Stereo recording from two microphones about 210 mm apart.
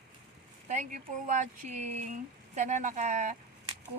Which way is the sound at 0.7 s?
35° right (ahead or behind).